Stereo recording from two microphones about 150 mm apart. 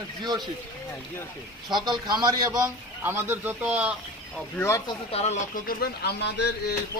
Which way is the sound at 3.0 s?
15° right (ahead or behind).